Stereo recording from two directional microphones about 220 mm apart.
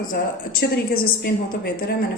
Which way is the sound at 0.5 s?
45° left (ahead or behind).